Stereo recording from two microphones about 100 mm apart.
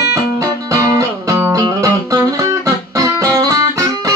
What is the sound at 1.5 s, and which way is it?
Music, 35° right (ahead or behind).